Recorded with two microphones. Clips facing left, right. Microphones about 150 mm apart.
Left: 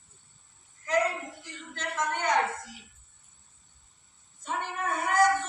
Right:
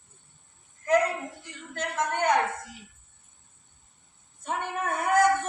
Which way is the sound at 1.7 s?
55° right (ahead or behind).